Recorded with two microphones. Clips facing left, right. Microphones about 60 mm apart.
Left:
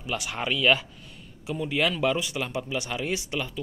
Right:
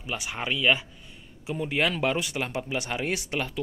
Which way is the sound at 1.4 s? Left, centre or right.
Right.